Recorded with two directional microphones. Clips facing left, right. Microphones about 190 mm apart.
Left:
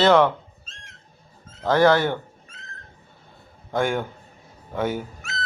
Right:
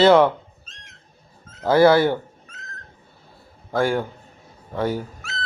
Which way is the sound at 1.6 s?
10° right (ahead or behind).